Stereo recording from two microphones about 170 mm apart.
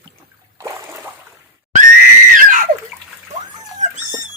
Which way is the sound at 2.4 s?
50° right (ahead or behind).